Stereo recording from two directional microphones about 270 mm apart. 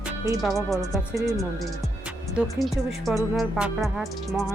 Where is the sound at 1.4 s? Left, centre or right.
Centre.